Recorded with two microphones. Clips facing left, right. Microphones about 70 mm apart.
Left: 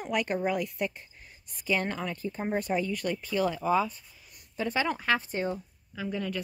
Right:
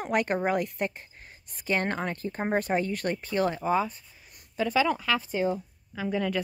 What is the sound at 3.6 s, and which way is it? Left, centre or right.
Speech, right.